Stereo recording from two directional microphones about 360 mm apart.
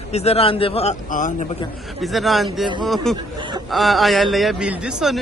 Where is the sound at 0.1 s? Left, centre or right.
Centre.